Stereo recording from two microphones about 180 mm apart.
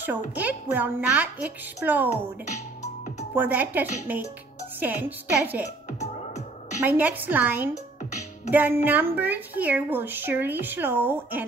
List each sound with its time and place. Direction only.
0.4 s speech: 10° right (ahead or behind)
2.4 s music: 40° left (ahead or behind)
3.3 s speech: 10° right (ahead or behind)
5.9 s music: 40° left (ahead or behind)
6.8 s speech: 10° right (ahead or behind)